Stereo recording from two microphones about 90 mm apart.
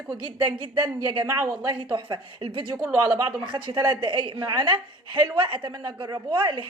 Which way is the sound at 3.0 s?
50° right (ahead or behind).